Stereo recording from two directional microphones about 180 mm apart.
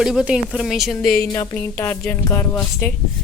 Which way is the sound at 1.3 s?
20° left (ahead or behind).